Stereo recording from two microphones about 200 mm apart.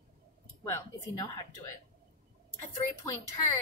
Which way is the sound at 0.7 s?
15° left (ahead or behind).